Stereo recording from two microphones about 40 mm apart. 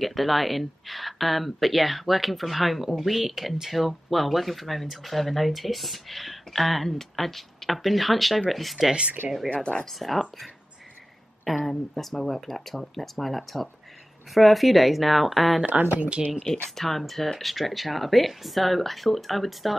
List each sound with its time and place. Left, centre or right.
0.0 s speech: centre
9.5 s speech: left
9.9 s speech: centre
15.8 s speech: right
16.7 s speech: centre